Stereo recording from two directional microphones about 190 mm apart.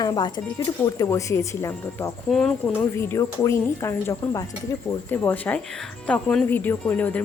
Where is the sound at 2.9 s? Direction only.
15° left (ahead or behind).